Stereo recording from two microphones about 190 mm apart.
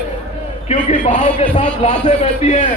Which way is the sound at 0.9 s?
40° left (ahead or behind).